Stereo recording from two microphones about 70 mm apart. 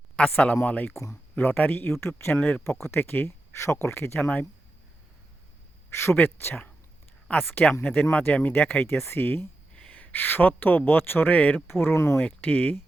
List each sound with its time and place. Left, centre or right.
0.2 s speech: centre; by 2.3 s left
2.3 s speech: centre
2.8 s speech: left
4.2 s speech: centre
5.9 s speech: left
9.7 s speech: centre
11.7 s speech: left
12.2 s speech: centre